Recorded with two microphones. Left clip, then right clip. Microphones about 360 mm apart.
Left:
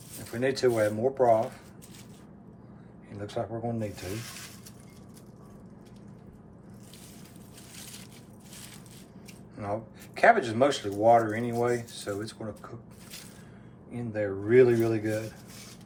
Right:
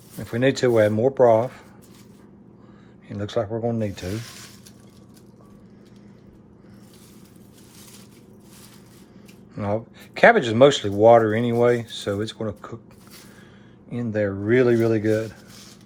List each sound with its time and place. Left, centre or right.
0.3 s speech: right
3.1 s speech: right
10.2 s speech: right
14.1 s speech: right